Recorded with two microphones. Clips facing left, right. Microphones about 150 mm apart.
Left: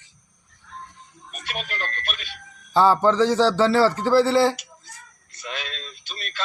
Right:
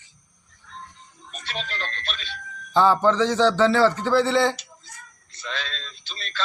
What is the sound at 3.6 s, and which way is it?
Speech, 5° left (ahead or behind).